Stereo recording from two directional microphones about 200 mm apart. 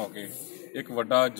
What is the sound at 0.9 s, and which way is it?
Speech, 15° left (ahead or behind).